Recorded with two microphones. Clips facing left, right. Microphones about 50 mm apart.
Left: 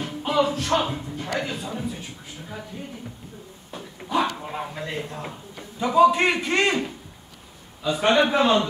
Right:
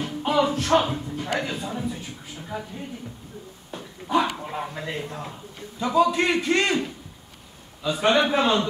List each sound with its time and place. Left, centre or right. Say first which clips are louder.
0.2 s music: even; centre
1.4 s a man's voice: right 1 dB; centre
3.7 s dog: right 2 dB; centre
4.4 s speech: even; centre
5.2 s a sound: left 1 dB; centre
5.9 s a man's voice: left 3 dB; centre
8.0 s a man's voice: left 1 dB; centre